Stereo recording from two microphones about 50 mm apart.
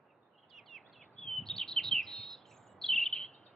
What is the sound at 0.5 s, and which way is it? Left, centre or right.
Bird, centre.